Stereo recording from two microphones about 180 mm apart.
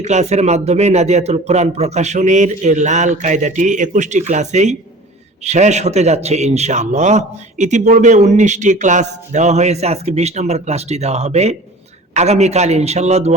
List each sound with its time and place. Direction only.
0.0 s a man's voice: 40° right (ahead or behind)